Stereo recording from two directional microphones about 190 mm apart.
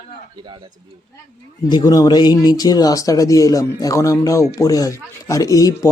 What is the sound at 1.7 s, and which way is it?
Speech, 20° left (ahead or behind).